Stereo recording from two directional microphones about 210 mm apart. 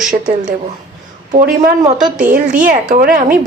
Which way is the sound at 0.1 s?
35° right (ahead or behind).